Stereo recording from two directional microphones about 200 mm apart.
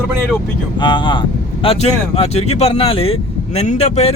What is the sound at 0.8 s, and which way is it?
Speech, 20° left (ahead or behind).